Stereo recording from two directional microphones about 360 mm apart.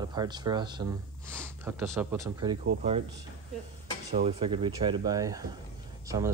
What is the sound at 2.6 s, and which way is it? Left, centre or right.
Speech, right.